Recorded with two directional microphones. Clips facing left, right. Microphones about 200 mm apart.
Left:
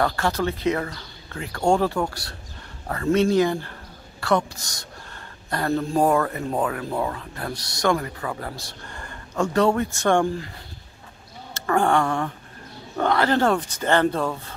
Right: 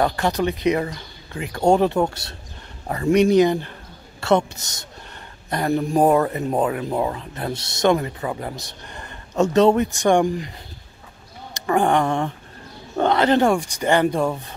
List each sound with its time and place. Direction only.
0.0 s speech: 15° right (ahead or behind)
11.5 s a sound: 15° right (ahead or behind)
12.9 s speech: 20° right (ahead or behind)